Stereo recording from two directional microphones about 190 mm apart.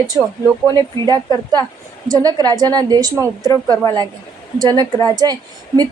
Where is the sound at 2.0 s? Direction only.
20° right (ahead or behind).